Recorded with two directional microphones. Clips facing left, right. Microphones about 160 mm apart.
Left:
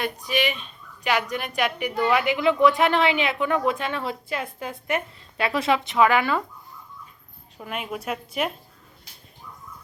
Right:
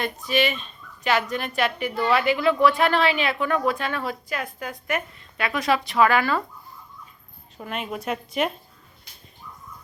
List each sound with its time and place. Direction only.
0.0 s speech: 15° left (ahead or behind)
7.6 s a woman's voice: 10° left (ahead or behind)